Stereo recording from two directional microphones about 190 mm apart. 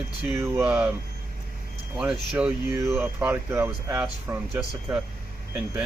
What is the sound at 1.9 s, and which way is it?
Speech, 5° right (ahead or behind).